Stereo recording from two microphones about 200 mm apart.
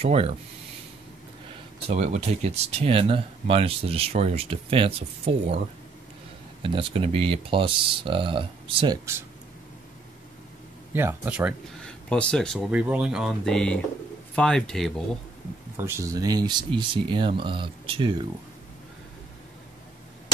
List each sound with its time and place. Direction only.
0.0 s speech: 30° right (ahead or behind)
1.9 s speech: 35° right (ahead or behind)
6.6 s speech: 25° right (ahead or behind)
10.9 s speech: 10° right (ahead or behind)
12.1 s speech: 5° left (ahead or behind)
15.8 s speech: 15° right (ahead or behind)